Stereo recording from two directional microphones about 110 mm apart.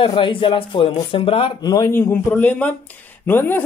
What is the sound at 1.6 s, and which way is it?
Speech, 35° left (ahead or behind).